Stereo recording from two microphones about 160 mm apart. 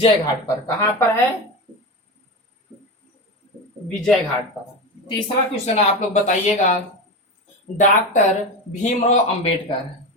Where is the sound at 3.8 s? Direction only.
5° left (ahead or behind).